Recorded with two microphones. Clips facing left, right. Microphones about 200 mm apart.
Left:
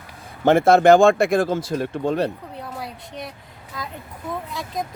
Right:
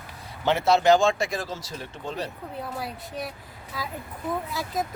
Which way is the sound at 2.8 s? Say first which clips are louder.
Even; centre (ahead or behind).